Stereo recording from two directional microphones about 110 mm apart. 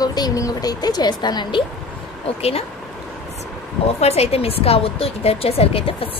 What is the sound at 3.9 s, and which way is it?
A woman's voice, 70° left (ahead or behind).